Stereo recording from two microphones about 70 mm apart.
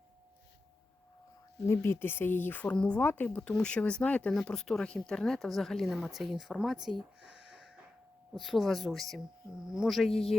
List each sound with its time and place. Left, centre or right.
1.6 s speech: left; by 3.1 s centre
3.1 s speech: left; by 6.6 s centre
6.8 s a sound: centre
8.3 s speech: centre